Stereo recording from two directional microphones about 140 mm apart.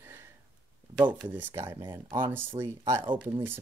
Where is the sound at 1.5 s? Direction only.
20° right (ahead or behind).